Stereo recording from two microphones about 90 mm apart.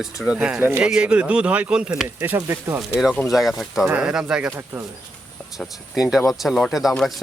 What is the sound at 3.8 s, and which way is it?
Speech, 15° right (ahead or behind).